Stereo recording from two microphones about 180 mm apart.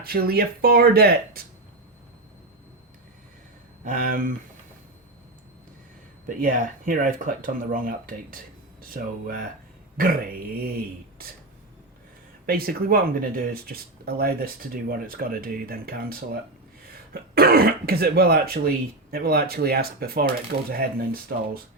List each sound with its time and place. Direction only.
0.0 s speech: 60° right (ahead or behind)
3.8 s speech: 50° right (ahead or behind)
6.2 s speech: 50° right (ahead or behind)
12.5 s speech: 55° right (ahead or behind)